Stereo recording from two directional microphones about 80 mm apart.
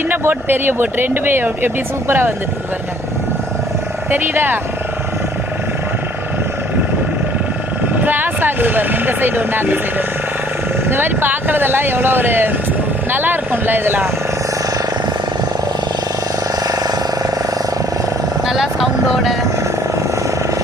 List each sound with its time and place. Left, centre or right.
0.1 s a woman's voice: right
4.1 s a woman's voice: right
8.0 s speech: right
10.8 s a woman's voice: right
16.6 s a sound: right
18.4 s vehicle: centre